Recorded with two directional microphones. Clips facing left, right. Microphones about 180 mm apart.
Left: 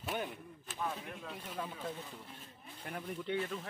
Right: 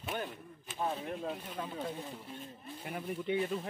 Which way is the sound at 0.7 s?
35° right (ahead or behind).